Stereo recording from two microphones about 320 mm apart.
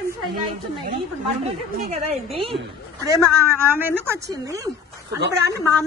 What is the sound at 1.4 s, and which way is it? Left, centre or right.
A woman's voice, centre.